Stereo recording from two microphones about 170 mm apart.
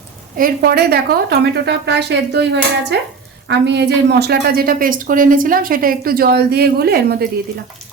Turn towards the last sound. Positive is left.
turn(degrees=-65)  # may be behind; listen again after turning